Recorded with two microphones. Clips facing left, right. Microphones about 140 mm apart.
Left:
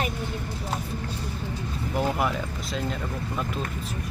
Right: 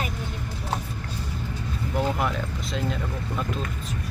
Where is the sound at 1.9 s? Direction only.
5° left (ahead or behind).